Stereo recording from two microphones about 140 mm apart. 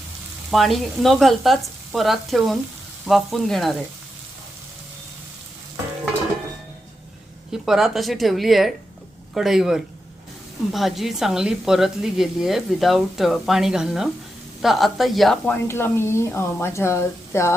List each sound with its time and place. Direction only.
0.5 s speech: centre (ahead or behind)
7.5 s speech: centre (ahead or behind)
15.4 s a woman's voice: 15° left (ahead or behind)